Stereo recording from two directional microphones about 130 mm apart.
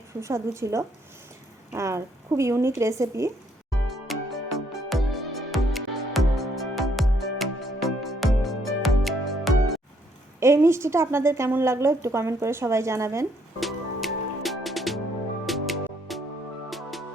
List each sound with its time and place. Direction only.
0.1 s a woman's voice: 20° right (ahead or behind)
3.7 s music: centre (ahead or behind)
10.4 s a woman's voice: 20° right (ahead or behind)
13.6 s music: centre (ahead or behind)